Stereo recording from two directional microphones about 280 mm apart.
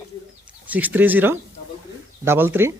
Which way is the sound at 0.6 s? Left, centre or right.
Centre.